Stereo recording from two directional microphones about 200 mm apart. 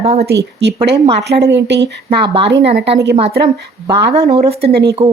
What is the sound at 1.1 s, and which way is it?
A woman's voice, 55° right (ahead or behind).